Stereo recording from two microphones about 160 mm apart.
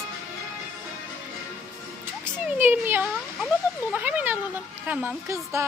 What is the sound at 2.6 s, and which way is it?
Speech, 15° right (ahead or behind).